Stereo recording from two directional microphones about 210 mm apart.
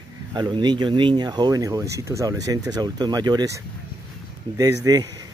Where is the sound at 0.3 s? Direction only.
20° right (ahead or behind).